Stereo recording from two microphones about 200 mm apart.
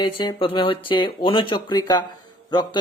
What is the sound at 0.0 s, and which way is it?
Speech, 25° left (ahead or behind).